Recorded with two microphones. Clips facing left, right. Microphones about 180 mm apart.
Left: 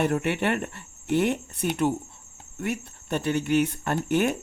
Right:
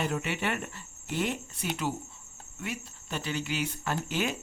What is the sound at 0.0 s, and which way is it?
Speech, 60° left (ahead or behind).